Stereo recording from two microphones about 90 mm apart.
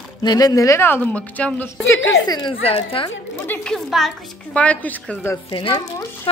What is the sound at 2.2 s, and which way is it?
Speech, 50° left (ahead or behind).